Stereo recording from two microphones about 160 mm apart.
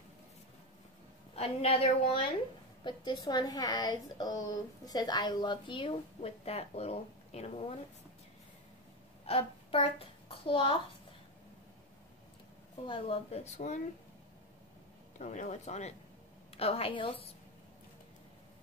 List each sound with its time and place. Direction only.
1.3 s a woman's voice: 40° left (ahead or behind)
9.2 s a child's voice: 35° left (ahead or behind)
12.8 s speech: 35° left (ahead or behind)
15.1 s speech: 50° left (ahead or behind); by 17.3 s 35° left (ahead or behind)